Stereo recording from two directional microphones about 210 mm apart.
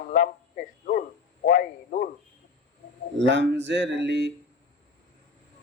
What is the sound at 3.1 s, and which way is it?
Speech, 55° right (ahead or behind).